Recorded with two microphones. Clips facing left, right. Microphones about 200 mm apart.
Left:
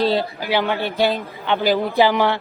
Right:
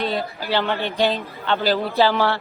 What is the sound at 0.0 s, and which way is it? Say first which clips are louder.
Speech: left 5 dB; 30° left (ahead or behind).